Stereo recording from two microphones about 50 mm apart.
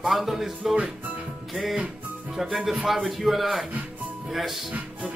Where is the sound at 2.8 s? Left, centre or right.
Centre.